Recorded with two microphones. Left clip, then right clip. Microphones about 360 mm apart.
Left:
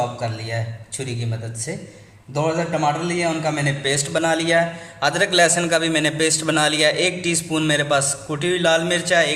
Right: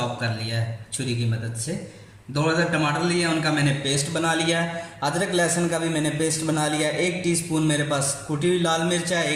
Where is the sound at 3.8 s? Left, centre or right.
Left.